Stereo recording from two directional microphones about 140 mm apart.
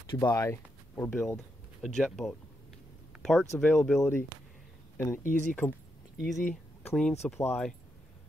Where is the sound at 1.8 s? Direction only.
Centre (ahead or behind).